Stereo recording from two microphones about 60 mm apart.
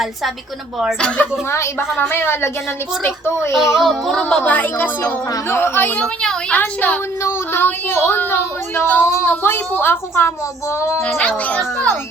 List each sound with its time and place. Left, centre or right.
0.9 s speech: left
1.5 s a woman's voice: left
2.0 s a woman's voice: left
3.5 s speech: centre
4.2 s a woman's voice: centre
4.4 s speech: left
5.5 s a woman's voice: left
6.5 s speech: left
7.2 s a woman's voice: left
7.6 s a woman's voice: left
9.3 s a woman's voice: left
11.2 s speech: left